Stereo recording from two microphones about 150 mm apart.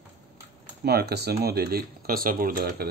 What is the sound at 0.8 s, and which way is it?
Speech, 90° right.